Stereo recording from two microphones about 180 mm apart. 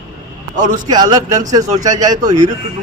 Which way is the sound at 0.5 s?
45° right (ahead or behind).